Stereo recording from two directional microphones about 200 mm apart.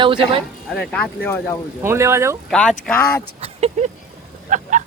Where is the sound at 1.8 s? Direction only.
15° right (ahead or behind).